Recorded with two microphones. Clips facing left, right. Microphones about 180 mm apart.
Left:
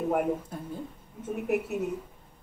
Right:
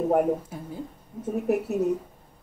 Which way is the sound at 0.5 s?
5° right (ahead or behind).